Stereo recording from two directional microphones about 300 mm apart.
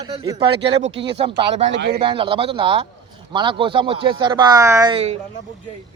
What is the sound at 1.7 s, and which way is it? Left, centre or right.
Speech, right.